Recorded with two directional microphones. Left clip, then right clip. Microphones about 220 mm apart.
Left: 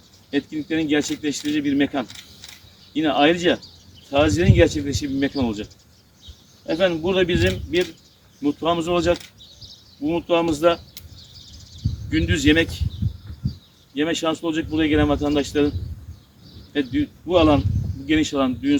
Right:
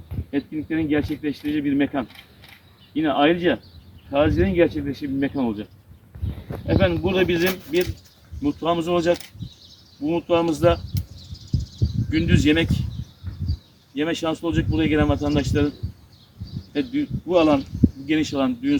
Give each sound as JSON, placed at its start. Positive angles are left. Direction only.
{"t": 0.3, "sound": "speech", "side_deg": 10}
{"t": 6.7, "sound": "speech", "side_deg": 5}
{"t": 12.1, "sound": "speech", "side_deg": 0}
{"t": 13.9, "sound": "speech", "side_deg": 0}
{"t": 16.7, "sound": "speech", "side_deg": 0}